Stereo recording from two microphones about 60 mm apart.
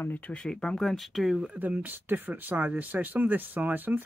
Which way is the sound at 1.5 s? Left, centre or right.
Right.